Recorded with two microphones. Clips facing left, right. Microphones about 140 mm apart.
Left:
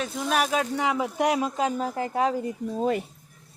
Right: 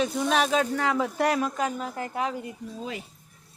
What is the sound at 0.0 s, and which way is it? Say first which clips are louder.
Speech: right 2 dB; centre (ahead or behind).